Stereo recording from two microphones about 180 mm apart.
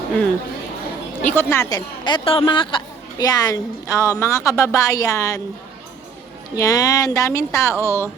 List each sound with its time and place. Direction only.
1.2 s speech: 10° left (ahead or behind)
2.0 s a woman's voice: 30° left (ahead or behind)
6.6 s speech: 20° left (ahead or behind)